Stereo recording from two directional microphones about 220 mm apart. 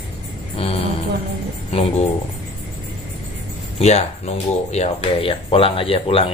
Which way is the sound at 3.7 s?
30° left (ahead or behind).